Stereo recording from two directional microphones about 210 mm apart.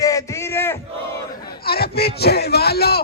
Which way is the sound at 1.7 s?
50° left (ahead or behind).